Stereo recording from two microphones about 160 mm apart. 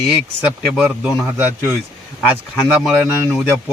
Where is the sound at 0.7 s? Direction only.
5° right (ahead or behind).